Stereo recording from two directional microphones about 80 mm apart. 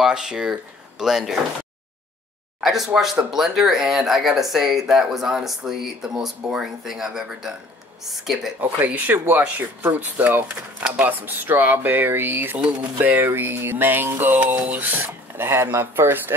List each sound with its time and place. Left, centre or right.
0.0 s speech: centre
2.6 s speech: centre
8.5 s a sound: right